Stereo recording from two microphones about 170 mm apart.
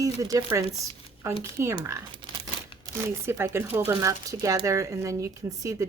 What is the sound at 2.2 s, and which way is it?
Crumpling, 30° right (ahead or behind).